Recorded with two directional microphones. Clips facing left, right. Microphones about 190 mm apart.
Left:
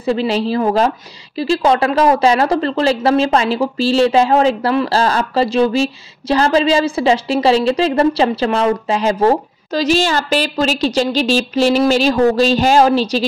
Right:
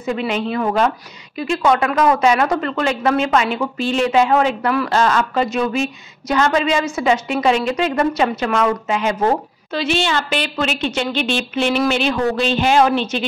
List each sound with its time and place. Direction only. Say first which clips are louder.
0.0 s a woman's voice: left 4 dB; 35° left (ahead or behind)